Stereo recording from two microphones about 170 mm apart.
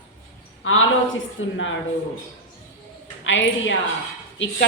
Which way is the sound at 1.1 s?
90° left.